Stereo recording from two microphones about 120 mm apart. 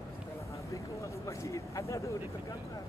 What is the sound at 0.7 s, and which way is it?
Vehicle, 25° left (ahead or behind).